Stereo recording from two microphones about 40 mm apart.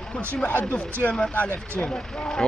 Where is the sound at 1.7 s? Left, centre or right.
Left.